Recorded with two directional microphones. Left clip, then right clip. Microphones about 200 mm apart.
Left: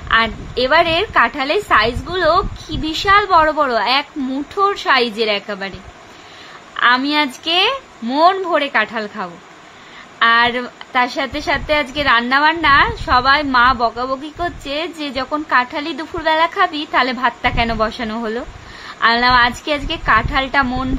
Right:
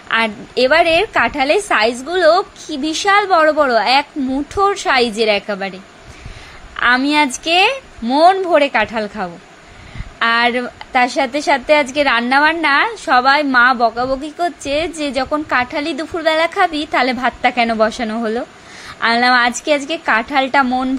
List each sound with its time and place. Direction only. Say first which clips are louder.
0.1 s a woman's voice: left 1 dB; 15° right (ahead or behind)
6.8 s a woman's voice: right 1 dB; 15° right (ahead or behind)